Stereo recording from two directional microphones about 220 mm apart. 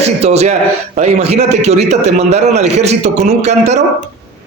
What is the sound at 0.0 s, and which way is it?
A man's voice, 30° right (ahead or behind).